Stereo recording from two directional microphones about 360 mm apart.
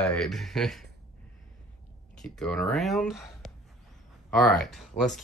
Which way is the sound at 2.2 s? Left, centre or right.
Centre.